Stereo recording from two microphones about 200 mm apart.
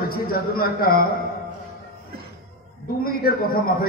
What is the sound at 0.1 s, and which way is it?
Speech, 50° left (ahead or behind).